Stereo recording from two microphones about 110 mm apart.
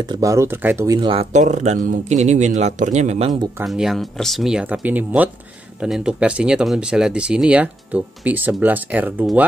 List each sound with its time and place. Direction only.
0.2 s speech: 25° right (ahead or behind)
1.1 s speech: 90° right
3.6 s speech: centre (ahead or behind)